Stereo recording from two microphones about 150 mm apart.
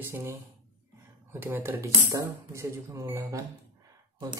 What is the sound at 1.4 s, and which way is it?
Speech, 15° right (ahead or behind).